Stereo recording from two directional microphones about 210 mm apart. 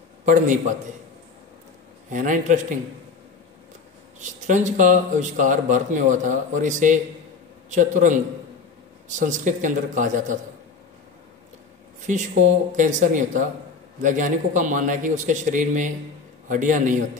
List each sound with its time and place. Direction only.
0.2 s a man's voice: 35° right (ahead or behind)
2.0 s speech: 40° right (ahead or behind)
4.2 s speech: 35° right (ahead or behind)
9.2 s speech: 35° right (ahead or behind)
12.1 s speech: 35° right (ahead or behind)